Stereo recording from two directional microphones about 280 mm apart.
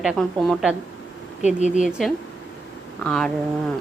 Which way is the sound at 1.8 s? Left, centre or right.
Centre.